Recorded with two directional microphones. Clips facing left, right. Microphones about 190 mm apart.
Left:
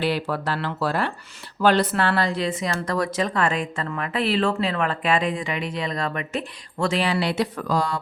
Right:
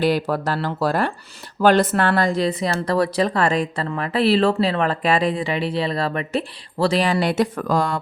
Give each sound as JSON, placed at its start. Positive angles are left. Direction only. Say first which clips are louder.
{"t": 0.0, "sound": "speech", "louder": "right 5 dB", "side_deg": -40}